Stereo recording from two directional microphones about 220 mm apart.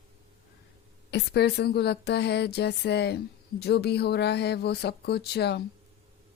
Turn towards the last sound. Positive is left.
turn(degrees=50)  # may be behind; listen again after turning